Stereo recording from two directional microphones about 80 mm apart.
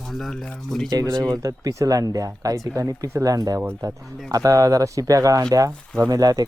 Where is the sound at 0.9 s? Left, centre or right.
Right.